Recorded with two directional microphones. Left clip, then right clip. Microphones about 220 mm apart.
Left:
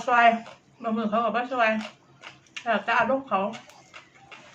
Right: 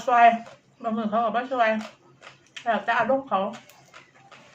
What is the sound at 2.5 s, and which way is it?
Speech, centre (ahead or behind).